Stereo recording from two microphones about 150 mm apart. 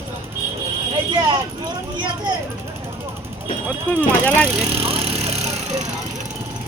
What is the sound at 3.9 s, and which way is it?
Vehicle, 10° left (ahead or behind).